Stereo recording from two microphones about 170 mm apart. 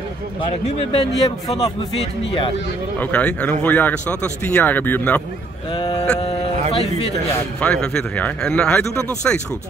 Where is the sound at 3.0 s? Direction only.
10° left (ahead or behind).